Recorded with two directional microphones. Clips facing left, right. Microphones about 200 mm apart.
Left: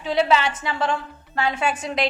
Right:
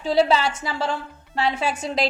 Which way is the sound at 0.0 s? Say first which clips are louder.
Right 1 dB; 35° right (ahead or behind).